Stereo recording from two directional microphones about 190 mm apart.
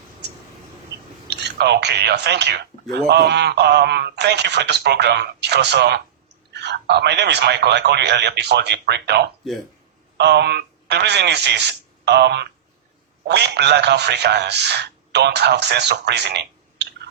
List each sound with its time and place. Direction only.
1.3 s a man's voice: 60° right (ahead or behind)